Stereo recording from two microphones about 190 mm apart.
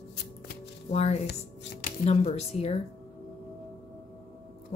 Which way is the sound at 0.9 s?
35° left (ahead or behind).